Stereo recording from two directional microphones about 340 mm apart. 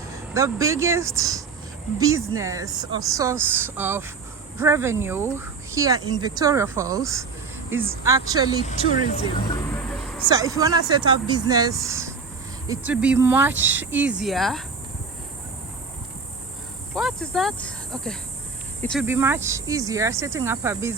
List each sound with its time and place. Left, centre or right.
0.1 s speech: centre
9.0 s speech: left
10.2 s speech: centre
16.9 s speech: centre